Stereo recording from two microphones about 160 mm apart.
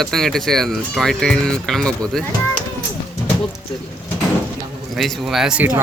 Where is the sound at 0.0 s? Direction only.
Centre (ahead or behind).